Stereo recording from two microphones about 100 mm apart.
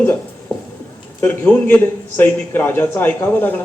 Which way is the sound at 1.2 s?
20° left (ahead or behind).